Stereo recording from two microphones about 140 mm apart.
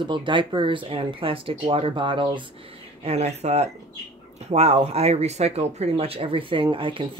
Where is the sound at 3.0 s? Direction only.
50° right (ahead or behind).